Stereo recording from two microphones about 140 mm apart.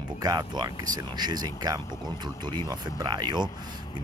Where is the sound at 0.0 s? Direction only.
30° right (ahead or behind).